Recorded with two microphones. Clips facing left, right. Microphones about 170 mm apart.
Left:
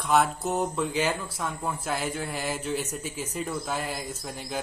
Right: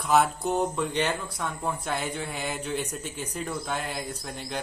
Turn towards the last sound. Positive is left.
turn(degrees=5)  # may be behind; listen again after turning